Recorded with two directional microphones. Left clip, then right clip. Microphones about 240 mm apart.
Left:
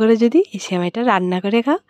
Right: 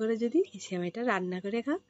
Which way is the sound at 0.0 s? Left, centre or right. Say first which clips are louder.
Left 14 dB; left.